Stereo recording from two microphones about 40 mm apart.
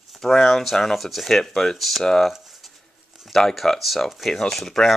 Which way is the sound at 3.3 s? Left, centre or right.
Centre.